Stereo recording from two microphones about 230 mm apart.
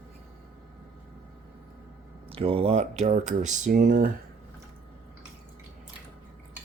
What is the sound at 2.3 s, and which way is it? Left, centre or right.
Speech, right.